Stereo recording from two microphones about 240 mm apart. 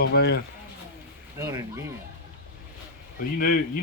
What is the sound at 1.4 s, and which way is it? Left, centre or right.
Speech, centre.